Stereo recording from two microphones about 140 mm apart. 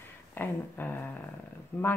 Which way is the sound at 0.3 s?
15° left (ahead or behind).